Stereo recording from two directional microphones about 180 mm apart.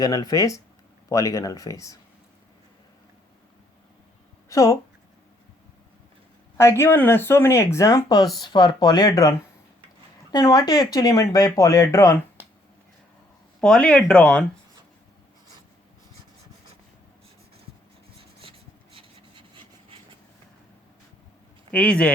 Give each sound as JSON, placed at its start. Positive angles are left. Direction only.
{"t": 0.0, "sound": "speech", "side_deg": 20}
{"t": 4.4, "sound": "speech", "side_deg": 20}
{"t": 6.6, "sound": "speech", "side_deg": 15}
{"t": 10.3, "sound": "speech", "side_deg": 20}
{"t": 13.6, "sound": "speech", "side_deg": 5}
{"t": 18.2, "sound": "rub", "side_deg": -30}
{"t": 21.7, "sound": "speech", "side_deg": 5}